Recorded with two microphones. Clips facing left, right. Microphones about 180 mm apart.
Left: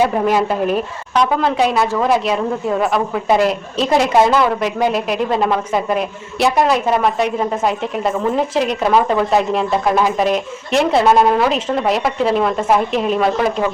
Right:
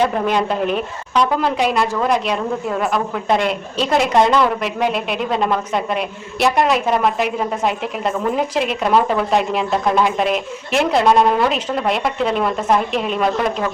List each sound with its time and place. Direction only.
0.0 s a man's voice: 5° left (ahead or behind)